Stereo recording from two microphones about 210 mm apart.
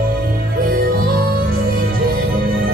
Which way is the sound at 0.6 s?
45° right (ahead or behind).